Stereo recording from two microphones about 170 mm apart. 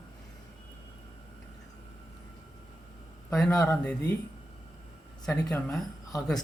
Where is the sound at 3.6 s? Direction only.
5° left (ahead or behind).